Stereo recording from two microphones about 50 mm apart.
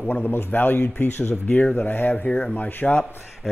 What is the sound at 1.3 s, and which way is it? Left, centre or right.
Speech, left.